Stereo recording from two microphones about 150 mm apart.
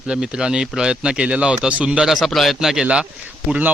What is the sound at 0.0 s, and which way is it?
Speech, 5° right (ahead or behind).